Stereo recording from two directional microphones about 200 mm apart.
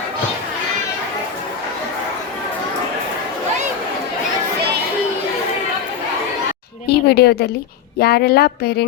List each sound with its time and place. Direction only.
6.8 s a woman's voice: 55° left (ahead or behind)